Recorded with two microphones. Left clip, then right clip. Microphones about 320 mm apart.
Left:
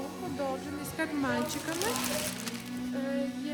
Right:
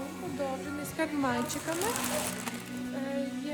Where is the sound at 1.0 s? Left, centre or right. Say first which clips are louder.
Right 1 dB; centre.